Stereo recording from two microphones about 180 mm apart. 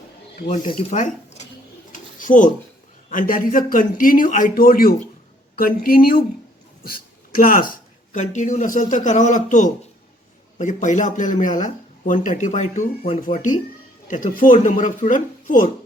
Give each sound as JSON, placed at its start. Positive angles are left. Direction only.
{"t": 0.3, "sound": "speech", "side_deg": 40}
{"t": 1.9, "sound": "a sound", "side_deg": 45}
{"t": 3.1, "sound": "speech", "side_deg": 50}